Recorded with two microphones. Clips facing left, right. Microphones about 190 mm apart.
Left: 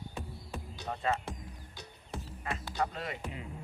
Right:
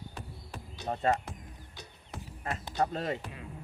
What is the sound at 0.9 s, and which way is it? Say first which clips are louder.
Speech: right 4 dB; 35° right (ahead or behind).